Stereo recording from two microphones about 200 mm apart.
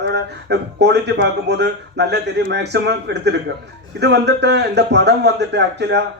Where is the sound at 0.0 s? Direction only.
60° right (ahead or behind).